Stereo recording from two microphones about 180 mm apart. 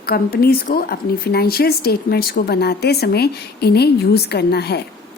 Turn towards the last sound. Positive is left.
turn(degrees=65)  # may be behind; listen again after turning